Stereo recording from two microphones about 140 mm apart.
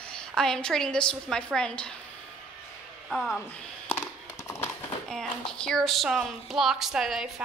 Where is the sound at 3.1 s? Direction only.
Centre (ahead or behind).